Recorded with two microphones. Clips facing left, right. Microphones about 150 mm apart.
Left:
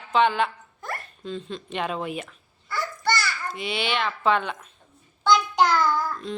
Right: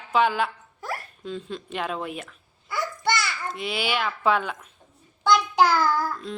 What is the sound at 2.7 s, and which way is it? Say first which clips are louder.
Babbling: even; 20° right (ahead or behind).